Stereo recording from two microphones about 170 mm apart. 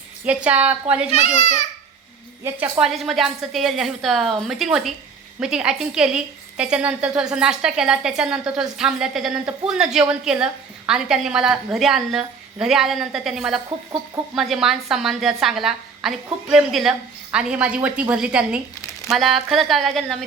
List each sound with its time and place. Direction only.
0.3 s a woman's voice: 10° right (ahead or behind)
1.1 s a child's voice: 40° left (ahead or behind)
2.4 s a woman's voice: 5° right (ahead or behind)